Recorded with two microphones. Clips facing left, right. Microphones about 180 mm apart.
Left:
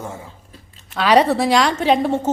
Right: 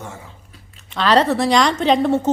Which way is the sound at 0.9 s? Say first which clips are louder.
Left 1 dB; 10° left (ahead or behind).